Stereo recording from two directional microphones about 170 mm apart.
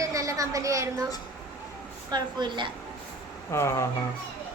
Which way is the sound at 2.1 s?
25° right (ahead or behind).